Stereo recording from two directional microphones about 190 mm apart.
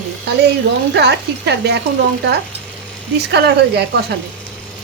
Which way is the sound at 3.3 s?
60° right (ahead or behind).